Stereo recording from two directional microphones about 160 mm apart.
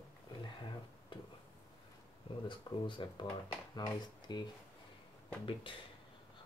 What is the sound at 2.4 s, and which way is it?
Speech, 30° left (ahead or behind).